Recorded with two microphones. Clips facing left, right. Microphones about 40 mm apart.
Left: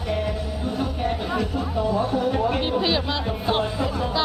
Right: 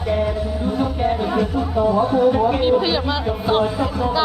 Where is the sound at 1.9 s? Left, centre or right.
Right.